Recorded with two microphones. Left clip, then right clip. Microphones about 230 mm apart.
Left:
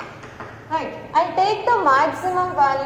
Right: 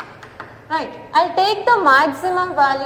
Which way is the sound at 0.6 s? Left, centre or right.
Right.